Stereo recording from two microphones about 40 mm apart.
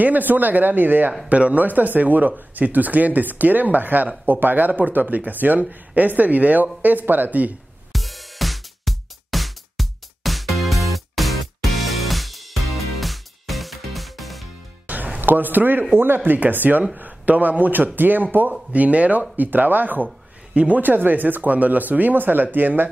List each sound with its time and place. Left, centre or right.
0.0 s speech: right
1.3 s speech: right
7.9 s music: centre
15.1 s speech: right
16.0 s speech: right
16.3 s a man's voice: right
18.7 s speech: right
19.3 s speech: right
20.5 s speech: right
20.8 s speech: right